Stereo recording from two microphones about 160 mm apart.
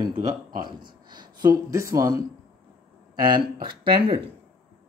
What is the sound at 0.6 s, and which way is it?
Speech, 25° right (ahead or behind).